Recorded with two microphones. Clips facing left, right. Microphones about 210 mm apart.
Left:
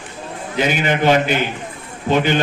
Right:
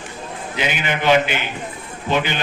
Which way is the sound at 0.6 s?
40° left (ahead or behind).